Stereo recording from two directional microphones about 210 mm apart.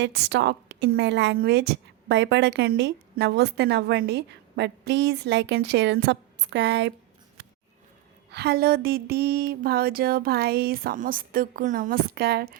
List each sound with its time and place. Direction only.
0.0 s a woman's voice: 55° right (ahead or behind)
8.3 s speech: 50° right (ahead or behind)